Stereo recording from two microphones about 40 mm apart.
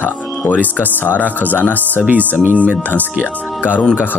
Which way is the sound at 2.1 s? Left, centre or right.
Right.